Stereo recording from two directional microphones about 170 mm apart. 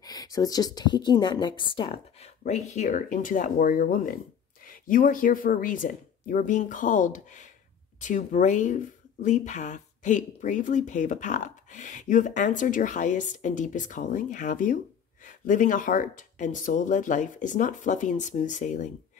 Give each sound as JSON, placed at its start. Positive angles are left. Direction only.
{"t": 0.0, "sound": "speech", "side_deg": 20}